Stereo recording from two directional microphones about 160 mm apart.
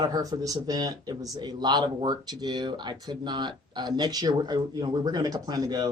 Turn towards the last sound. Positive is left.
turn(degrees=-25)  # may be behind; listen again after turning